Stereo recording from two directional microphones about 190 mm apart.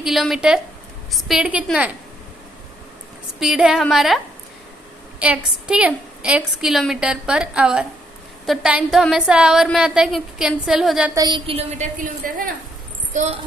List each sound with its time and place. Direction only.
0.0 s a woman's voice: centre (ahead or behind)
3.3 s a woman's voice: 5° right (ahead or behind)
5.2 s a woman's voice: 5° right (ahead or behind)
11.1 s a woman's voice: 25° right (ahead or behind)
12.0 s a woman's voice: 50° right (ahead or behind)
13.1 s a child's voice: 35° right (ahead or behind)